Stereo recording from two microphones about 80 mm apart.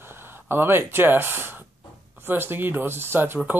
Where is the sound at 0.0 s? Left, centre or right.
Right.